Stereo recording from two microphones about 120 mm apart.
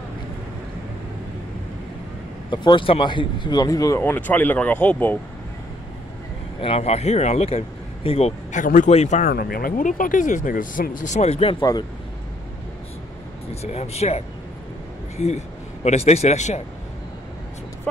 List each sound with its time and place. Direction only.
2.5 s speech: 40° left (ahead or behind); by 5.2 s 15° left (ahead or behind)
6.6 s speech: 60° left (ahead or behind)
8.5 s speech: 90° left
9.8 s speech: 90° left; by 11.5 s 60° left (ahead or behind)
13.6 s a man's voice: 60° left (ahead or behind)